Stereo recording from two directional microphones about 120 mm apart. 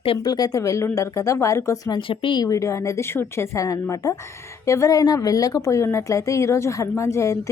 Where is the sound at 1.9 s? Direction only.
40° left (ahead or behind).